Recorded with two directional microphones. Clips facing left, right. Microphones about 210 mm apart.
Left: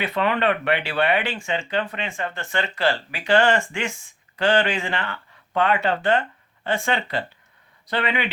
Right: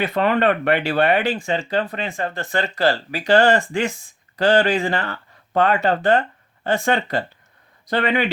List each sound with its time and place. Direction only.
0.0 s speech: 40° right (ahead or behind)